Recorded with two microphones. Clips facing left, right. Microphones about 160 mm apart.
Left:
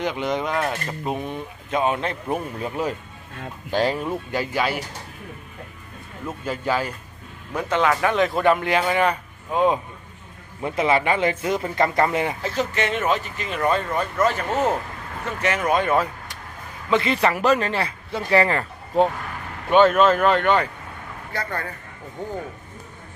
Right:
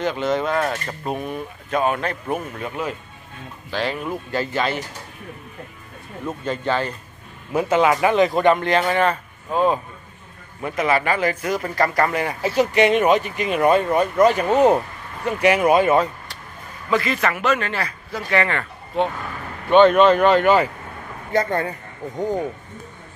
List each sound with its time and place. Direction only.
0.0 s speech: 15° left (ahead or behind)
2.6 s speech: 35° left (ahead or behind)
4.0 s speech: 25° left (ahead or behind)
4.4 s speech: 10° left (ahead or behind)
6.4 s speech: 5° left (ahead or behind)
7.5 s a man's voice: 10° right (ahead or behind); by 12.4 s 20° left (ahead or behind)
12.4 s speech: 10° right (ahead or behind)
16.9 s speech: 30° left (ahead or behind)
19.7 s a man's voice: 5° left (ahead or behind)
21.3 s speech: 20° right (ahead or behind)